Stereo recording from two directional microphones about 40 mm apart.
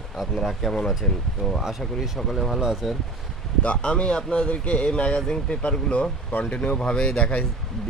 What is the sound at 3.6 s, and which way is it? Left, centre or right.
Speech, left.